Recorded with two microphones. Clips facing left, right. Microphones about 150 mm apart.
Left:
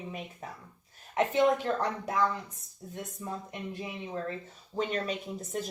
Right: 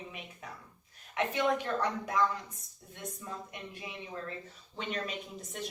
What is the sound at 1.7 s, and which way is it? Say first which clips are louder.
Speech: left 2 dB; 30° left (ahead or behind).